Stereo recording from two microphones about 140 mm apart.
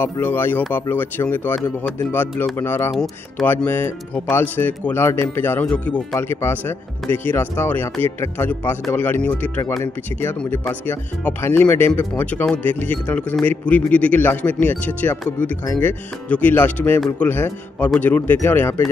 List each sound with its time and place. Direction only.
0.0 s speech: 15° left (ahead or behind)
2.9 s speech: 5° left (ahead or behind)
3.6 s speech: 15° left (ahead or behind)
10.6 s speech: 10° left (ahead or behind)